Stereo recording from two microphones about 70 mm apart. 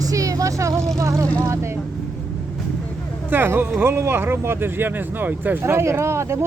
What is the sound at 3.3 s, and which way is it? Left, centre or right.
Speech, right.